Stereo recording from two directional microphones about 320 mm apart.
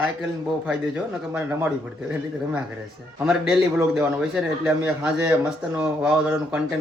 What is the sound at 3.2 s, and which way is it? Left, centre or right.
A man's voice, centre.